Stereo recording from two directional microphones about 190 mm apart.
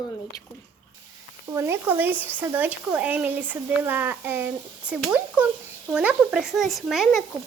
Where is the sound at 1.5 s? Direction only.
15° right (ahead or behind).